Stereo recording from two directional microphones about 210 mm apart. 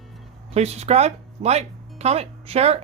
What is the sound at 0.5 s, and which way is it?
Speech, 30° right (ahead or behind).